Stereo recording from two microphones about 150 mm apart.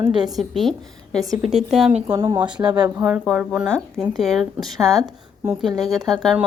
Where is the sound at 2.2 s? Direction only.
30° right (ahead or behind).